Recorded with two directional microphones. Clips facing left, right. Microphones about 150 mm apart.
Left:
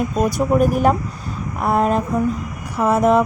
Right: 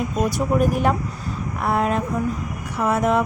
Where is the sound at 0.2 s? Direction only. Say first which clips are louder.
Left 3 dB; 40° left (ahead or behind).